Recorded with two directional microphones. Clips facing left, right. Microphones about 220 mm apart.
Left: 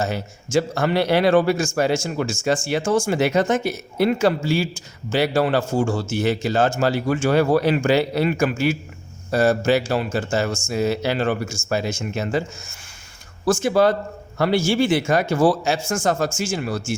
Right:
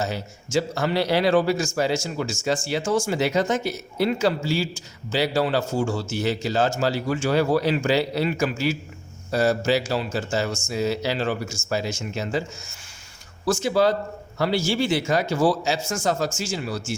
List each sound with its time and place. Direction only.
0.0 s a man's voice: 50° left (ahead or behind)